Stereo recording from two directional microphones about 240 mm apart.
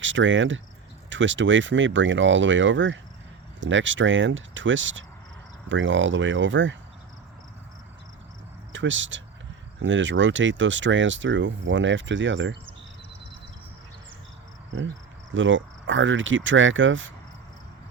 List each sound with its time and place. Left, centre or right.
0.0 s speech: right
8.7 s speech: right
15.3 s speech: right